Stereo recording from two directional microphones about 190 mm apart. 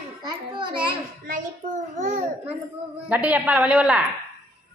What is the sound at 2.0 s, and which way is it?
Speech, 40° right (ahead or behind).